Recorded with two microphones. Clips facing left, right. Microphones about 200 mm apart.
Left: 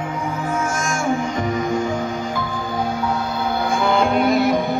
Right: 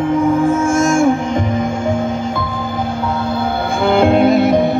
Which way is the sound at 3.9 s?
25° right (ahead or behind).